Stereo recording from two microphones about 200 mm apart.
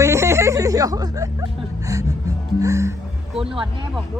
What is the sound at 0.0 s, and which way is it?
Music, 15° right (ahead or behind).